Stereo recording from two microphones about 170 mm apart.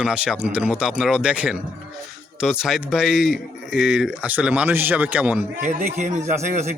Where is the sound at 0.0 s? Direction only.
5° right (ahead or behind).